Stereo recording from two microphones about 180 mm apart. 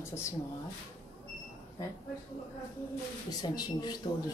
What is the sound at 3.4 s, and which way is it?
Speech, 25° left (ahead or behind).